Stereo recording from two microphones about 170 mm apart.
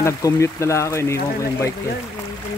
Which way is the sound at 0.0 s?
15° left (ahead or behind).